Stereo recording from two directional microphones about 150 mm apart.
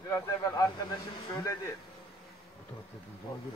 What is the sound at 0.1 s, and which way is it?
Speech, 20° left (ahead or behind).